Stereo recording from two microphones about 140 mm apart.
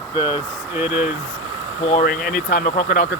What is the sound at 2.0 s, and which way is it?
Speech, 90° left.